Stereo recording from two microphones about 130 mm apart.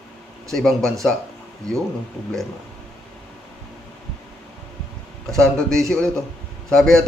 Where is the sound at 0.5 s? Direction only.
5° left (ahead or behind).